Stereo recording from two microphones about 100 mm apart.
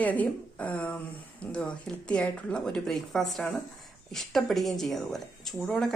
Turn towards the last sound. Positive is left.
turn(degrees=5)  # may be behind; listen again after turning